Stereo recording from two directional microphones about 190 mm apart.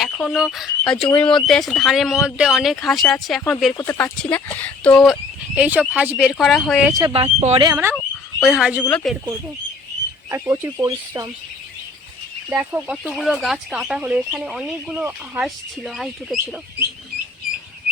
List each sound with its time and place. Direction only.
0.0 s speech: centre (ahead or behind)
5.5 s speech: 10° right (ahead or behind)
6.9 s speech: 25° right (ahead or behind)
7.9 s frog: centre (ahead or behind)
8.8 s speech: 5° left (ahead or behind)
10.2 s speech: 15° right (ahead or behind)
12.5 s speech: 10° right (ahead or behind)